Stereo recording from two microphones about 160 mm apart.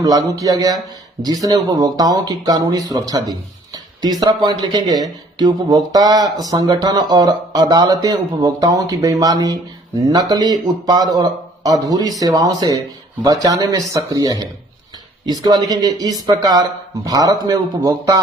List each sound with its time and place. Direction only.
0.0 s speech: 20° right (ahead or behind)